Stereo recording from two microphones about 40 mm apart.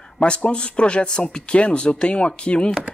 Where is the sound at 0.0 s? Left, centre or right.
Left.